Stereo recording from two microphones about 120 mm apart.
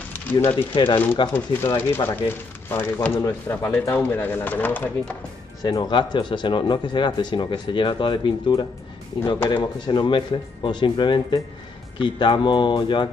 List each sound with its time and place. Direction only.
0.3 s speech: 15° left (ahead or behind)
0.7 s speech: 45° left (ahead or behind)
1.3 s speech: 20° left (ahead or behind)
5.6 s speech: 35° left (ahead or behind)